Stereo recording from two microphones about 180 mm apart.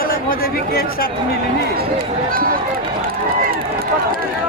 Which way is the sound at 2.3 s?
55° right (ahead or behind).